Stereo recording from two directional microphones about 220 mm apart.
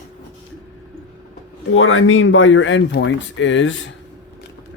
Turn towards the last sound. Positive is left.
turn(degrees=60)  # may be behind; listen again after turning